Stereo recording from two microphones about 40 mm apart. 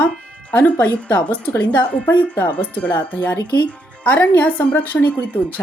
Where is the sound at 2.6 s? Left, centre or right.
Left.